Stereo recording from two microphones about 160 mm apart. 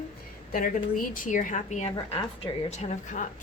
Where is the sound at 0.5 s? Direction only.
60° left (ahead or behind).